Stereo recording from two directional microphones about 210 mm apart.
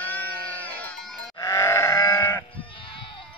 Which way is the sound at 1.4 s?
15° left (ahead or behind).